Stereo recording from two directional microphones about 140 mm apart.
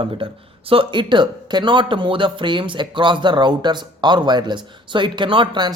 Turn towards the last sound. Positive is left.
turn(degrees=-35)  # may be behind; listen again after turning